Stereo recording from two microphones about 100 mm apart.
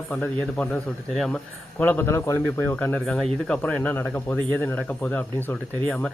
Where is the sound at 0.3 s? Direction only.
10° left (ahead or behind).